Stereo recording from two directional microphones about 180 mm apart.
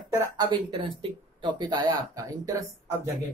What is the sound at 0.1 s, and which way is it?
Speech, 20° right (ahead or behind).